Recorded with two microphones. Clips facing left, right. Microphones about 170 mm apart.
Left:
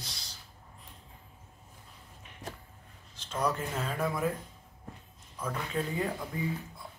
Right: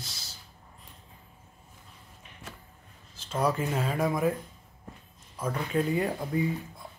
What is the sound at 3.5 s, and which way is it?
Speech, 10° right (ahead or behind).